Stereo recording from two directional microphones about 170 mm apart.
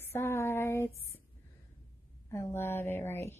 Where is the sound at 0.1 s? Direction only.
15° left (ahead or behind).